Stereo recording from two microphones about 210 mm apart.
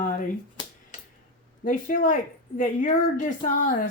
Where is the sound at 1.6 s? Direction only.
40° left (ahead or behind).